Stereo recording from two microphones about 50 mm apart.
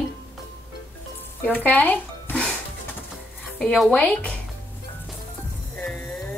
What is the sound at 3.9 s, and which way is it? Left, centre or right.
Speech, left.